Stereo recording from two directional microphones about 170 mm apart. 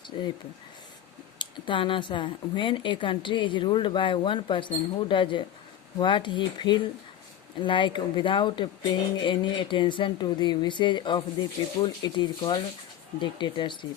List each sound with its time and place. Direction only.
1.4 s speech: 30° left (ahead or behind)